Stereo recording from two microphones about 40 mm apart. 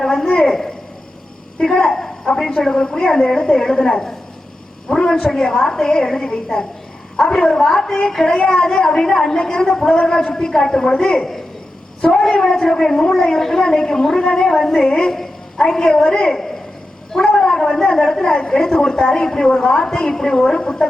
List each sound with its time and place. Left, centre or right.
0.2 s a woman's voice: centre
2.8 s a woman's voice: centre
17.3 s a sound: centre
17.9 s a woman's voice: centre